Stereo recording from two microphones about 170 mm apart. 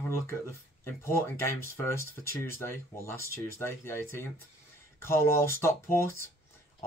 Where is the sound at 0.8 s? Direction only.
15° left (ahead or behind).